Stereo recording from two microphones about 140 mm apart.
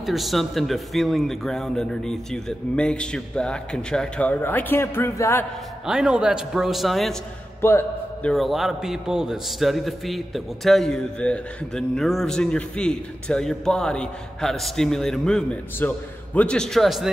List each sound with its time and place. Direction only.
0.0 s a man's voice: centre (ahead or behind); by 5.4 s 20° left (ahead or behind)
5.9 s a man's voice: 5° right (ahead or behind)
7.6 s a man's voice: 15° left (ahead or behind)
8.3 s a man's voice: centre (ahead or behind)